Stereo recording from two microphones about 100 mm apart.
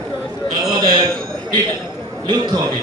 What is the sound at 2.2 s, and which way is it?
Speech, 50° right (ahead or behind).